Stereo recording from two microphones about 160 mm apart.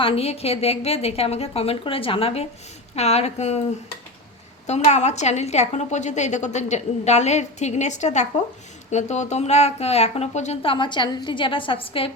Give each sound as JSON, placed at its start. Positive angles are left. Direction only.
{"t": 0.0, "sound": "a woman's voice", "side_deg": 35}
{"t": 4.6, "sound": "a woman's voice", "side_deg": 45}